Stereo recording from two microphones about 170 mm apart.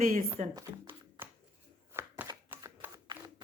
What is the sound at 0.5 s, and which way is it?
Shuffling cards, 20° right (ahead or behind).